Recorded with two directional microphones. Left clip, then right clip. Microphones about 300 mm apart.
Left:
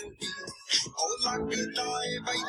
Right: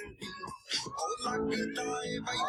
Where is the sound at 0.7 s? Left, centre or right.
Left.